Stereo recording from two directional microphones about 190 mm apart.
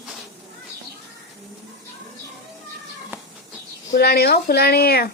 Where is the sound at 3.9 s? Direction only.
55° left (ahead or behind).